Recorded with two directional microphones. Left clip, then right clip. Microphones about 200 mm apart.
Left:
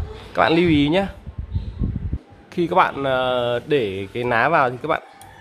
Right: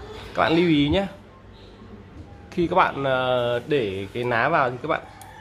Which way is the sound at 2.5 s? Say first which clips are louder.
Left 2 dB; 25° left (ahead or behind).